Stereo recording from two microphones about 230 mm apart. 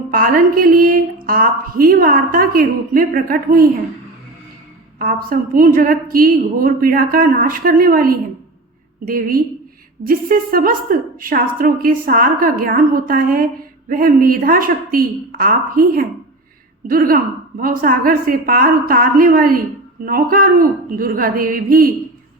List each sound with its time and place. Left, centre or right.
0.1 s a woman's voice: right
4.9 s a woman's voice: right